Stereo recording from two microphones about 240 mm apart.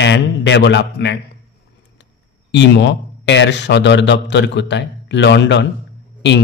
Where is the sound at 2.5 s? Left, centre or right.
Left.